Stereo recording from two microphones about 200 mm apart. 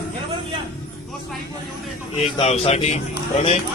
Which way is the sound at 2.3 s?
30° left (ahead or behind).